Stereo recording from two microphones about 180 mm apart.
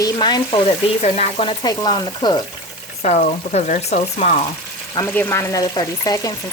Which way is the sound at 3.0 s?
40° left (ahead or behind).